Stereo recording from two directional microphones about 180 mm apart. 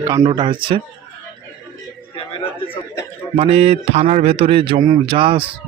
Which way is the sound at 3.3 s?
35° right (ahead or behind).